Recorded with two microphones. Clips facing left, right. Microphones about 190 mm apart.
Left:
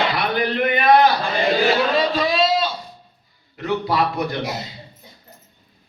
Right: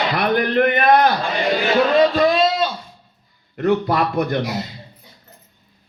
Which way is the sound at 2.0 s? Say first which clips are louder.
Right 4 dB; 50° right (ahead or behind).